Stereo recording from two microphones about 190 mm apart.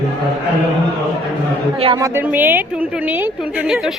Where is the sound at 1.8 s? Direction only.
25° right (ahead or behind).